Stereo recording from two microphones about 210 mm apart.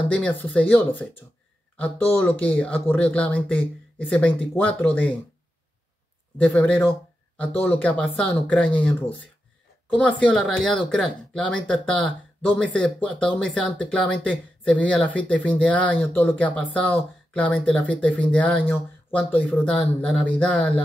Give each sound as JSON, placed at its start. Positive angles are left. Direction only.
{"t": 0.1, "sound": "speech", "side_deg": 5}
{"t": 6.3, "sound": "speech", "side_deg": 10}
{"t": 9.9, "sound": "speech", "side_deg": 5}